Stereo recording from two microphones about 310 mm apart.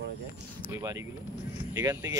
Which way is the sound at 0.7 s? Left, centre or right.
Centre.